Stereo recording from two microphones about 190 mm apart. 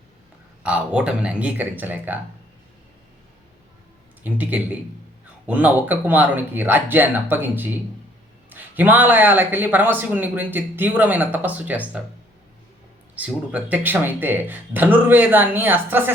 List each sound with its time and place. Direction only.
0.6 s speech: 5° right (ahead or behind)
4.2 s speech: 10° right (ahead or behind)
13.1 s speech: 5° right (ahead or behind)